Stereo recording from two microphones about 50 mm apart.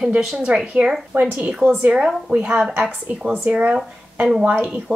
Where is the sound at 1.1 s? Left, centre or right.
Right.